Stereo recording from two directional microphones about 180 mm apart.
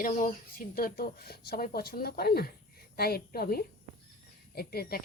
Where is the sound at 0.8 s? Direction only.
55° left (ahead or behind).